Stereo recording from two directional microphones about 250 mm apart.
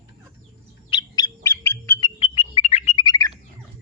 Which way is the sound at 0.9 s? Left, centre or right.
Centre.